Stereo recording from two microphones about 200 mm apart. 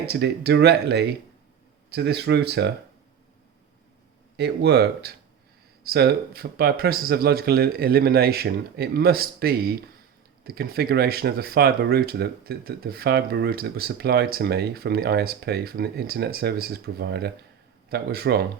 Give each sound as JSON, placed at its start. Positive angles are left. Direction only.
{"t": 0.0, "sound": "speech", "side_deg": -55}
{"t": 4.4, "sound": "speech", "side_deg": -55}